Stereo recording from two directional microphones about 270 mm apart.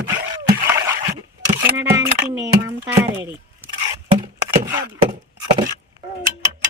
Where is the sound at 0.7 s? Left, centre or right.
Centre.